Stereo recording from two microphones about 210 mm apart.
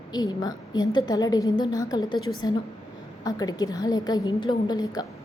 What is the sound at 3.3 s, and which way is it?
A woman's voice, 20° left (ahead or behind).